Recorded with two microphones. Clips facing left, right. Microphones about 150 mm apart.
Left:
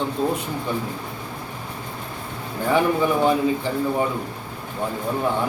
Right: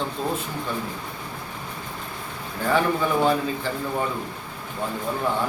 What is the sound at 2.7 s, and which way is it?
Speech, 15° left (ahead or behind).